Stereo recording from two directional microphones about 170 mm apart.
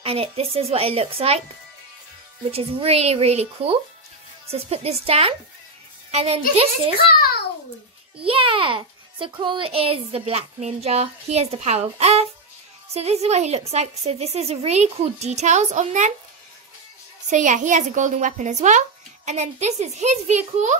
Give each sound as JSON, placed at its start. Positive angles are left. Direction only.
{"t": 0.0, "sound": "a child's voice", "side_deg": -35}
{"t": 2.5, "sound": "a child's voice", "side_deg": -35}
{"t": 8.2, "sound": "a child's voice", "side_deg": -30}
{"t": 17.3, "sound": "a woman's voice", "side_deg": -45}